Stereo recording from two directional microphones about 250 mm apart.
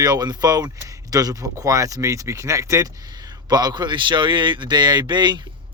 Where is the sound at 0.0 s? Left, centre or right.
Centre.